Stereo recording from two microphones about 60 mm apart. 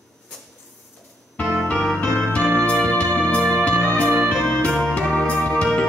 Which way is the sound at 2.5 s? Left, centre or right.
Centre.